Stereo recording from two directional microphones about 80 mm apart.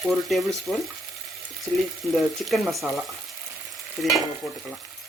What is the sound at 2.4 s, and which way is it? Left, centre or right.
Frying, centre.